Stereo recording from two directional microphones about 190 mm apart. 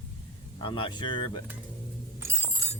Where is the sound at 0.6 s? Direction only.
25° left (ahead or behind).